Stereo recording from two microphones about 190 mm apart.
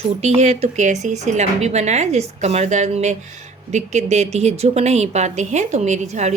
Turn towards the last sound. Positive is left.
turn(degrees=-35)  # may be behind; listen again after turning